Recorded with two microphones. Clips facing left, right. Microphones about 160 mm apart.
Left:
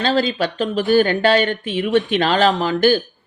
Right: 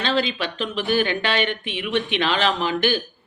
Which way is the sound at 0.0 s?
40° left (ahead or behind).